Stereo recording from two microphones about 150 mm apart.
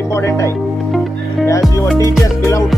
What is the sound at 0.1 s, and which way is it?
Speech, 20° left (ahead or behind).